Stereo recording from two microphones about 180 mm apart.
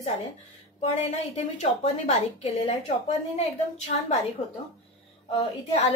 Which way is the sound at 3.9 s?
55° left (ahead or behind).